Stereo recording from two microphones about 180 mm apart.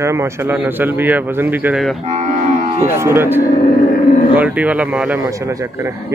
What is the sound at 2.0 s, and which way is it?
Livestock, 40° right (ahead or behind).